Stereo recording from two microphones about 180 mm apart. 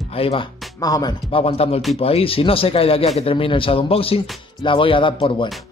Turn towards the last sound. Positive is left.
turn(degrees=30)  # may be behind; listen again after turning